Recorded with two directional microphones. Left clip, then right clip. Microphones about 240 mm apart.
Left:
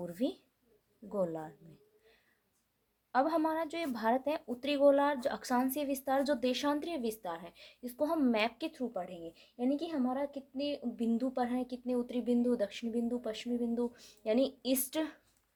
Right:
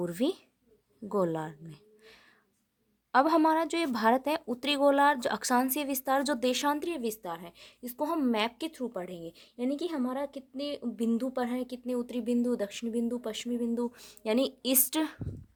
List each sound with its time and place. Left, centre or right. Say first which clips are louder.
0.0 s a woman's voice: right 6 dB; right